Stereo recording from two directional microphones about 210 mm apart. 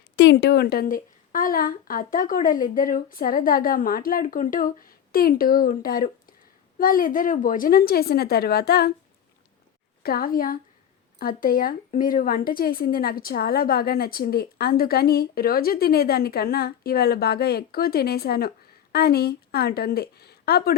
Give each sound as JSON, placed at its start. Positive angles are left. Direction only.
{"t": 0.2, "sound": "a woman's voice", "side_deg": 55}
{"t": 10.0, "sound": "a woman's voice", "side_deg": 45}